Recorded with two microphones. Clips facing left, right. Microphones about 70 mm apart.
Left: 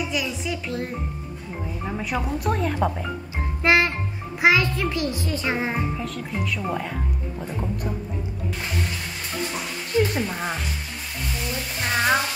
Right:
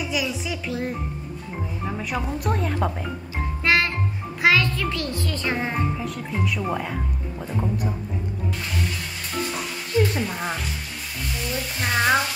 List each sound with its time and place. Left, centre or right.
0.1 s speech: centre
3.6 s music: left
4.4 s a child's voice: centre
5.9 s speech: centre
9.9 s a woman's voice: centre
11.9 s speech: centre